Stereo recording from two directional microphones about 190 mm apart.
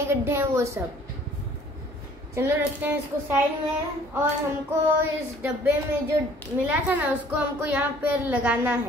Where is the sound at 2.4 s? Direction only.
10° right (ahead or behind).